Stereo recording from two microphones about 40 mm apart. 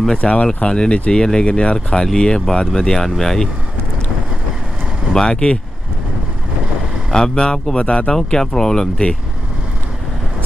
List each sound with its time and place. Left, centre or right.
0.2 s speech: left; by 3.4 s centre
5.1 s speech: centre
7.1 s speech: centre